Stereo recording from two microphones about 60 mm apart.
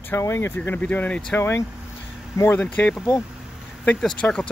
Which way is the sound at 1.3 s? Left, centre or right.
Left.